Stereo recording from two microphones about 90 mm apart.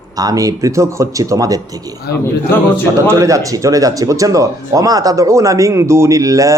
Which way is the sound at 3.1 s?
35° right (ahead or behind).